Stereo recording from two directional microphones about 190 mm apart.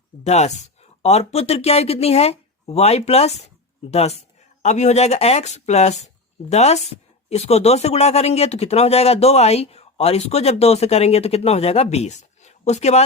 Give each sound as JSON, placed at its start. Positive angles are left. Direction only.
{"t": 0.3, "sound": "speech", "side_deg": 35}